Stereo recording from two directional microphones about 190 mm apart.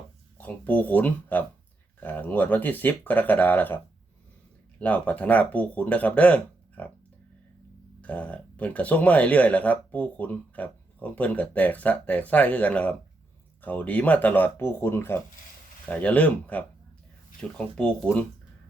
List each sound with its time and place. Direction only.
0.3 s speech: 10° left (ahead or behind)
4.8 s speech: 5° left (ahead or behind)
8.0 s speech: 10° left (ahead or behind)